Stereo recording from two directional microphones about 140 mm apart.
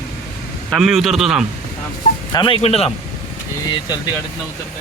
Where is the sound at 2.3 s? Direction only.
35° left (ahead or behind).